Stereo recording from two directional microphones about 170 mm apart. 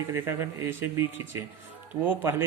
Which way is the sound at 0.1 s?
15° right (ahead or behind).